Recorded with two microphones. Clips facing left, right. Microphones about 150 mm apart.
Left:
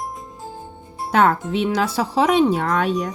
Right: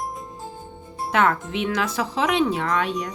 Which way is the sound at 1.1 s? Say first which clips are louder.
Left 4 dB; 35° left (ahead or behind).